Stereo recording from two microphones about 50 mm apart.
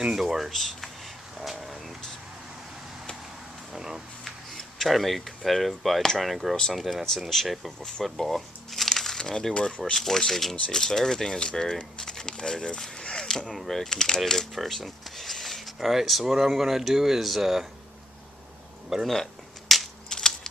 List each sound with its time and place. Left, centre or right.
0.2 s speech: centre
1.4 s a sound: centre
3.7 s speech: centre
4.5 s a sound: centre
5.4 s speech: centre
7.8 s speech: centre
9.9 s speech: centre
11.8 s a sound: centre
13.5 s speech: centre
19.0 s cap gun: centre
20.1 s typewriter: centre